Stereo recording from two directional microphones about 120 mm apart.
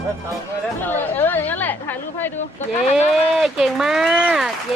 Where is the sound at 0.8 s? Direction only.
15° left (ahead or behind).